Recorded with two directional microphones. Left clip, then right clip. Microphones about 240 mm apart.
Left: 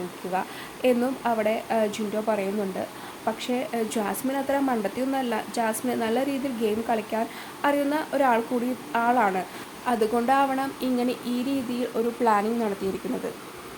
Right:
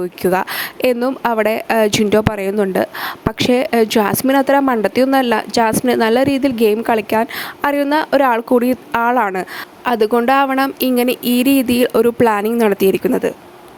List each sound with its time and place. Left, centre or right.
0.3 s speech: right